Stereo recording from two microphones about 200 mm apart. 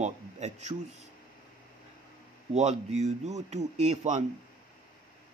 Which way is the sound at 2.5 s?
35° right (ahead or behind).